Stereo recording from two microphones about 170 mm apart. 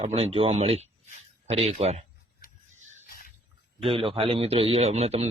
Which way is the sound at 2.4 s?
55° left (ahead or behind).